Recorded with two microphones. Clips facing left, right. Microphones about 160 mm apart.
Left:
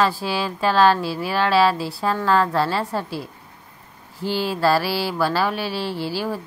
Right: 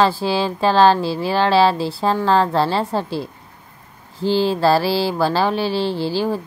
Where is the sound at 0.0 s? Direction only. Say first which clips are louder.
Right 4 dB; 30° right (ahead or behind).